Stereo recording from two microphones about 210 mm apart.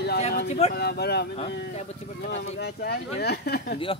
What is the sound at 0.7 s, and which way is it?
Speech, 50° left (ahead or behind).